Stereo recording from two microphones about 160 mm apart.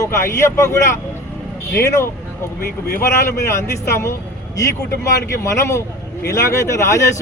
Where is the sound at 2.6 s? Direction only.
70° left (ahead or behind).